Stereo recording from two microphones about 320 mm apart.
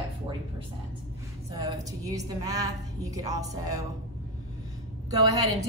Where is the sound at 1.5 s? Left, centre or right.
Centre.